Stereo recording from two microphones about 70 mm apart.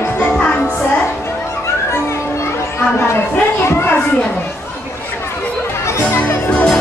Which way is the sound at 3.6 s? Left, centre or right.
Left.